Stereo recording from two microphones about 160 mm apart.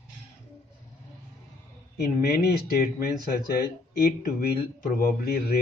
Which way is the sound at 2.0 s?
80° left.